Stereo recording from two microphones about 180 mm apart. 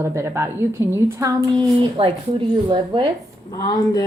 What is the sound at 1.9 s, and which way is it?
Speech, 30° right (ahead or behind).